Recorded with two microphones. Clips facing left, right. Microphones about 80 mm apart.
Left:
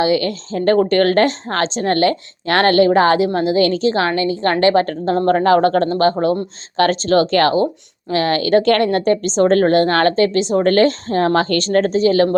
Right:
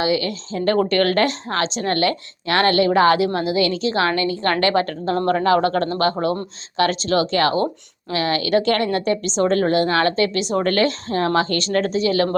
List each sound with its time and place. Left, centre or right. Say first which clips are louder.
0.0 s a woman's voice: left 4 dB; left